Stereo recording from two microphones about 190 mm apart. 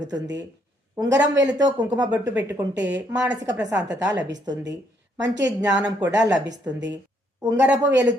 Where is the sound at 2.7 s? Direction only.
65° right (ahead or behind).